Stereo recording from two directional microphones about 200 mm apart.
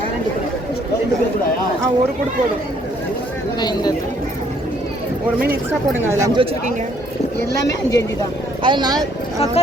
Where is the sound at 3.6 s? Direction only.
20° left (ahead or behind).